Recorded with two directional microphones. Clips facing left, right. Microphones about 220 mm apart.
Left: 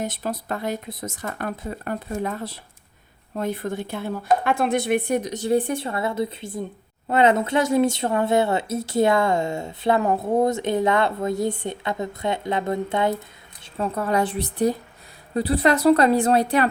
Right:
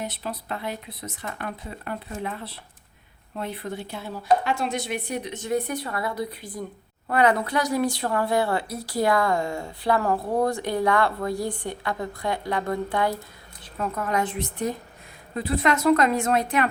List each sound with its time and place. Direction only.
0.0 s a woman's voice: 45° left (ahead or behind)